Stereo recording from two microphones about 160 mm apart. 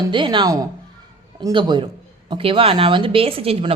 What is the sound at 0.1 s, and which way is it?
A woman's voice, 30° right (ahead or behind).